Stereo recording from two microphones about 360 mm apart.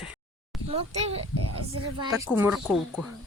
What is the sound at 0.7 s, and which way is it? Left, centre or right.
Speech, centre.